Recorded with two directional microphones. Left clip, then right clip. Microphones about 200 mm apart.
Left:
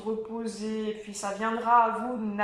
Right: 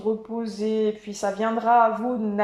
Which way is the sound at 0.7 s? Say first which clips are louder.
Right 9 dB; 25° right (ahead or behind).